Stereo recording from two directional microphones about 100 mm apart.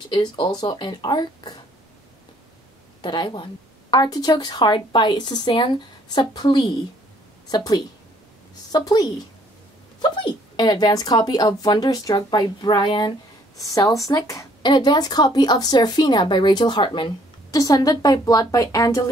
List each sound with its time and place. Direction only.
0.1 s speech: 50° left (ahead or behind)
3.0 s a woman's voice: 50° left (ahead or behind); by 14.5 s 30° left (ahead or behind)
14.6 s speech: 50° left (ahead or behind)
17.5 s a woman's voice: 35° left (ahead or behind)